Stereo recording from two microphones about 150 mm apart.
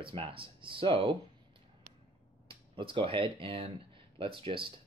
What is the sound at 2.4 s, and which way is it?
Speech, 35° right (ahead or behind).